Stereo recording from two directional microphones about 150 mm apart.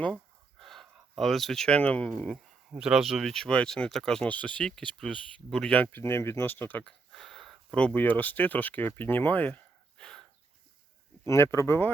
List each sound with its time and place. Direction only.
0.6 s speech: centre (ahead or behind)
10.0 s a sound: 5° left (ahead or behind)
11.3 s speech: 20° left (ahead or behind)